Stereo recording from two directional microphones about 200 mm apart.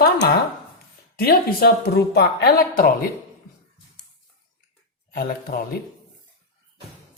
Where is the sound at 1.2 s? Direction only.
50° left (ahead or behind).